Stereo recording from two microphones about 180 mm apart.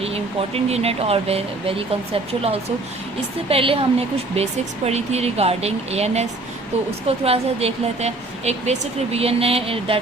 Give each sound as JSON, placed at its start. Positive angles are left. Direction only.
{"t": 0.0, "sound": "a woman's voice", "side_deg": -35}
{"t": 7.3, "sound": "a woman's voice", "side_deg": -35}